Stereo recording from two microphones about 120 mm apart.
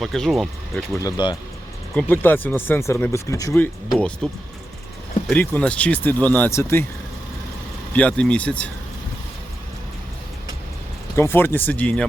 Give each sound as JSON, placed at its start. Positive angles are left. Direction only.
{"t": 0.0, "sound": "speech", "side_deg": 0}
{"t": 1.0, "sound": "speech", "side_deg": 35}
{"t": 2.0, "sound": "speech", "side_deg": 15}
{"t": 3.9, "sound": "speech", "side_deg": 5}
{"t": 5.3, "sound": "speech", "side_deg": 10}
{"t": 7.9, "sound": "speech", "side_deg": 10}
{"t": 11.2, "sound": "speech", "side_deg": 20}